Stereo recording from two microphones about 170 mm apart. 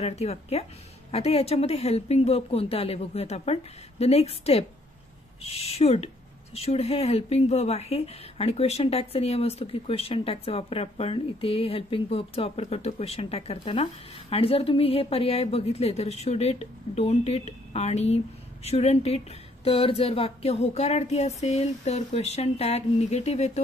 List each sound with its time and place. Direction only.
0.0 s speech: 40° left (ahead or behind)